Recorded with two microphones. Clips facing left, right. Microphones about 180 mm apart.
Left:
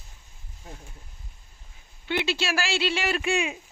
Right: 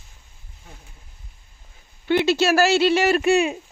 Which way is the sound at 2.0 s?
45° right (ahead or behind).